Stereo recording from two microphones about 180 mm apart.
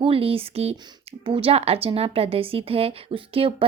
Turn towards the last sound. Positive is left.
turn(degrees=-30)  # may be behind; listen again after turning